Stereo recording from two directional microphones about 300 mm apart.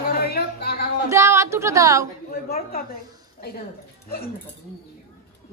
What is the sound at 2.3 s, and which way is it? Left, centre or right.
Speech, left.